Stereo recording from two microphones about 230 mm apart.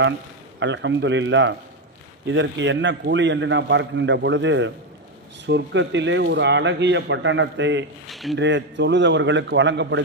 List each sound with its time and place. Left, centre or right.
0.6 s a man's voice: right
8.0 s speech: centre
8.4 s a man's voice: right